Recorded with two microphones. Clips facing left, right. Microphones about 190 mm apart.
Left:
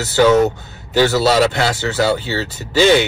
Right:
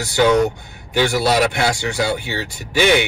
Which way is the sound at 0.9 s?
15° right (ahead or behind).